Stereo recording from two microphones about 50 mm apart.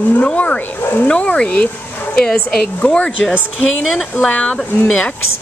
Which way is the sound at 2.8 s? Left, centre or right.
Left.